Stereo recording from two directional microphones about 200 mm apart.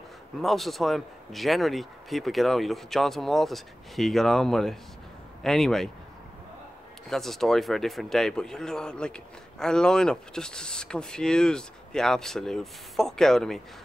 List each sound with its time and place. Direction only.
0.4 s speech: centre (ahead or behind)
7.1 s speech: centre (ahead or behind)